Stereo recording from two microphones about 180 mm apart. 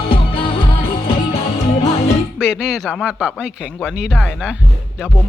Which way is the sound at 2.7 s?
Centre (ahead or behind).